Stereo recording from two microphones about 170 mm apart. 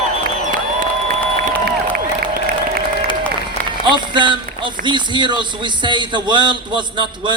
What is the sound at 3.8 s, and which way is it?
Run, 30° right (ahead or behind).